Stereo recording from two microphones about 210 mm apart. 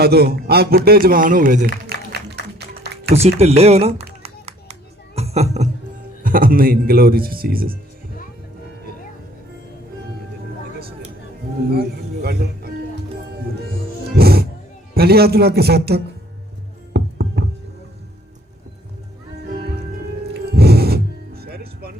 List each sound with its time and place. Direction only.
0.0 s a man's voice: 50° right (ahead or behind)
3.2 s speech: 30° right (ahead or behind)
4.2 s a sound: 30° right (ahead or behind)
6.2 s a man's voice: 40° right (ahead or behind)
11.7 s speech: 50° right (ahead or behind)
14.2 s music: 45° right (ahead or behind)
14.9 s a man's voice: 50° right (ahead or behind)
16.9 s music: 50° right (ahead or behind)
20.3 s music: 50° right (ahead or behind)